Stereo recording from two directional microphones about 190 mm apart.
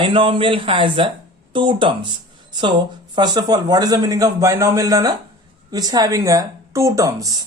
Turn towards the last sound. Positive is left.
turn(degrees=-20)  # may be behind; listen again after turning